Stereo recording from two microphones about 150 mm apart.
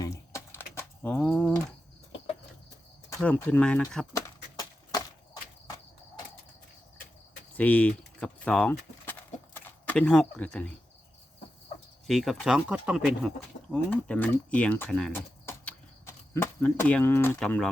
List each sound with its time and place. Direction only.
0.0 s a sound: 20° left (ahead or behind)
3.1 s speech: 15° left (ahead or behind)
7.5 s speech: 10° left (ahead or behind)
12.0 s speech: centre (ahead or behind)
13.7 s speech: 10° left (ahead or behind)
15.1 s horse: 15° left (ahead or behind)
17.4 s speech: 5° left (ahead or behind)